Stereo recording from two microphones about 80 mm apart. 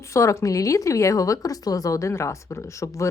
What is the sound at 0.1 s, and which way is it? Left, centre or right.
Speech, left.